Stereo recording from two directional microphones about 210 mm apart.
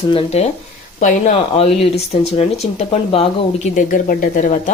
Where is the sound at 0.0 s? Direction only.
25° left (ahead or behind).